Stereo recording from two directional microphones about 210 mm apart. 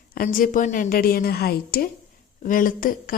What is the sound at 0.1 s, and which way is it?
A woman's voice, 40° left (ahead or behind).